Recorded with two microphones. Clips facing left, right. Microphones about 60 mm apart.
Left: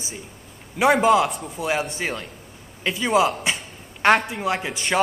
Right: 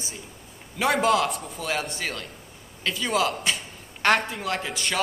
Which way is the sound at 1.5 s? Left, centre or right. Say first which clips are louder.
Left 4 dB; centre.